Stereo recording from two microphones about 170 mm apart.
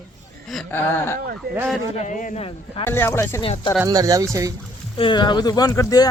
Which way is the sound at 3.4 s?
30° left (ahead or behind).